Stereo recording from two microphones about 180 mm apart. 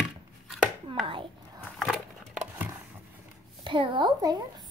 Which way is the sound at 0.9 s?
30° right (ahead or behind).